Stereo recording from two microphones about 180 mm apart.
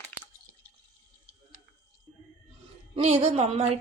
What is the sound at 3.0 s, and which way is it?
Speech, 35° right (ahead or behind).